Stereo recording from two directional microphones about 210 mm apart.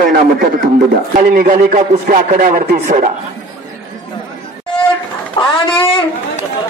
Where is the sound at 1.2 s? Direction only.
40° right (ahead or behind).